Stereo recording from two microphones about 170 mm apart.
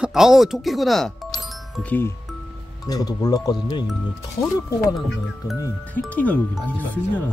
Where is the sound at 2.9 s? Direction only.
20° left (ahead or behind).